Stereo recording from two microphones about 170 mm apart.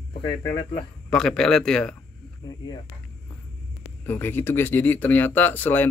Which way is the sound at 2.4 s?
25° left (ahead or behind).